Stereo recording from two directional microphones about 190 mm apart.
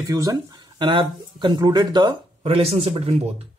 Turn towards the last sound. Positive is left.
turn(degrees=-35)  # may be behind; listen again after turning